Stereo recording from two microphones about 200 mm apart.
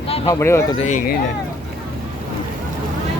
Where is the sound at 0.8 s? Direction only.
40° left (ahead or behind).